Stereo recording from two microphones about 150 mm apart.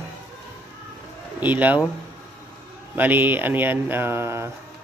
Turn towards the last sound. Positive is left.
turn(degrees=-15)  # may be behind; listen again after turning